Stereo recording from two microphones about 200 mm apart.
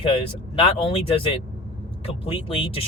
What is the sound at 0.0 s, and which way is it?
Speech, 25° left (ahead or behind).